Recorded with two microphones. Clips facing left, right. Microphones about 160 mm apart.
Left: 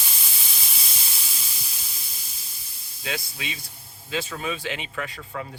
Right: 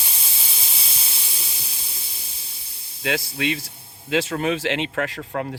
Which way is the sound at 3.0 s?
85° right.